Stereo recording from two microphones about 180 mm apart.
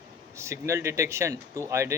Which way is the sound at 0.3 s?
15° right (ahead or behind).